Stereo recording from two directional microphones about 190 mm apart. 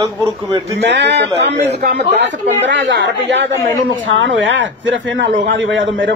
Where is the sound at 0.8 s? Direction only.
65° right (ahead or behind).